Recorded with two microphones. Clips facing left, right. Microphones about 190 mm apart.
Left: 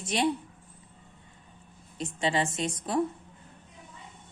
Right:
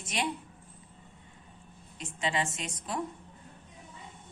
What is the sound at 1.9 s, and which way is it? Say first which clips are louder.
A woman's voice: left 4 dB; 35° left (ahead or behind).